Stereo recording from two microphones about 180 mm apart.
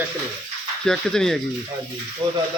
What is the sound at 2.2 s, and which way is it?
Speech, 25° right (ahead or behind).